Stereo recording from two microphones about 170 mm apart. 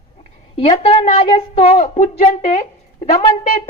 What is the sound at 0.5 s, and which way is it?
A woman's voice, 35° left (ahead or behind).